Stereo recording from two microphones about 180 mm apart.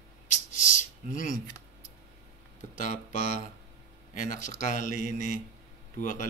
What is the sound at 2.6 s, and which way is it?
A man's voice, 45° left (ahead or behind).